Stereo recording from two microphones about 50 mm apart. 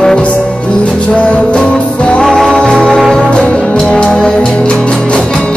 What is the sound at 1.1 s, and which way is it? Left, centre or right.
Music, left.